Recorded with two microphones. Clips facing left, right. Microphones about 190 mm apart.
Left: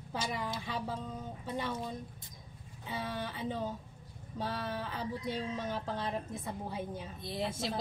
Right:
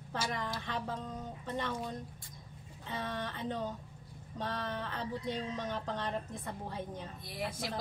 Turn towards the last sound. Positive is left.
turn(degrees=25)  # may be behind; listen again after turning